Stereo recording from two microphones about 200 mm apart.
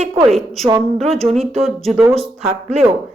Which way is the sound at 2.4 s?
30° right (ahead or behind).